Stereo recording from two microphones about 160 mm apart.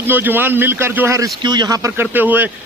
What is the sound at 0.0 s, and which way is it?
A man's voice, 15° right (ahead or behind).